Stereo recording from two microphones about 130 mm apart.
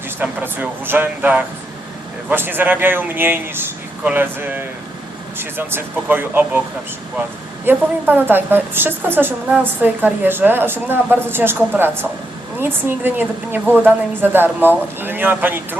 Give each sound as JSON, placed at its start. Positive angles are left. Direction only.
{"t": 0.2, "sound": "a woman's voice", "side_deg": -15}
{"t": 7.6, "sound": "a woman's voice", "side_deg": -15}